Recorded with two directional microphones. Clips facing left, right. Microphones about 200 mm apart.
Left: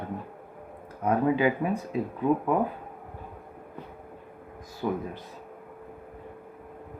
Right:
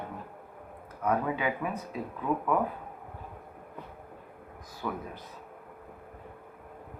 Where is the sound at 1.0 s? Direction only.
30° left (ahead or behind).